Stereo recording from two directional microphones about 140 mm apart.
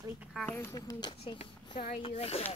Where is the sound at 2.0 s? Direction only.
45° left (ahead or behind).